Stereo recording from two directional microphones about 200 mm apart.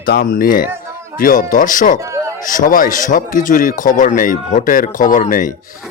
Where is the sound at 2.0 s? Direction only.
15° right (ahead or behind).